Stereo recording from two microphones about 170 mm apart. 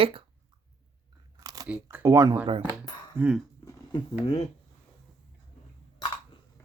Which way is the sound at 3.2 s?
5° right (ahead or behind).